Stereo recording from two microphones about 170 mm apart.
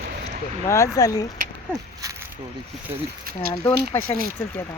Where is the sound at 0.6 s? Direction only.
15° left (ahead or behind).